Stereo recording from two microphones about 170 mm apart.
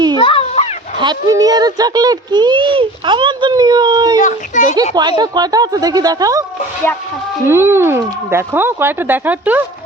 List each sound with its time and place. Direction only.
0.2 s a sound: 30° left (ahead or behind)
0.9 s speech: 25° right (ahead or behind)
4.2 s a child's voice: 45° left (ahead or behind)
4.9 s speech: 25° right (ahead or behind)
7.4 s speech: 15° right (ahead or behind)